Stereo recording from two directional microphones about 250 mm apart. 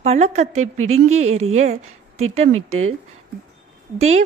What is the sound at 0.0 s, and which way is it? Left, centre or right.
Speech, right.